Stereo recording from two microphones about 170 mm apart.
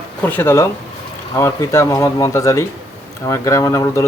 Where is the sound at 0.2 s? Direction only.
10° left (ahead or behind).